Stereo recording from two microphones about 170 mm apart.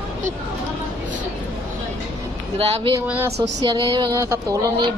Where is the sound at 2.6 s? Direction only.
35° right (ahead or behind).